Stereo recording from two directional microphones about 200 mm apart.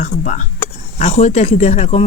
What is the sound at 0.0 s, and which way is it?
Speech, 40° left (ahead or behind).